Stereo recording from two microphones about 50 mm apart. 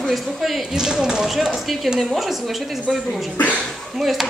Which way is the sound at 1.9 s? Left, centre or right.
Centre.